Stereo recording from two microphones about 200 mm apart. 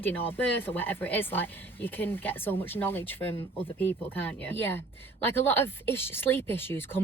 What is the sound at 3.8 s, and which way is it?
Speech, 10° left (ahead or behind).